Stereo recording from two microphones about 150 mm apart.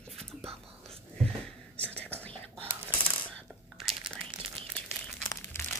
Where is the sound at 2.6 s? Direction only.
15° right (ahead or behind).